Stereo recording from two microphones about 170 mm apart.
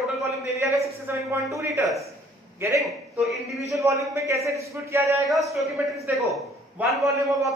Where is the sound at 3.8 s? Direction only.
20° right (ahead or behind).